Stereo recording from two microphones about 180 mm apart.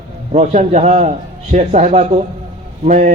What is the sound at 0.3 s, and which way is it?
A man's voice, 40° right (ahead or behind).